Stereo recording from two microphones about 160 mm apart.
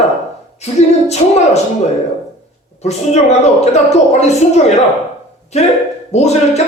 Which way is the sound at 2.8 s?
45° left (ahead or behind).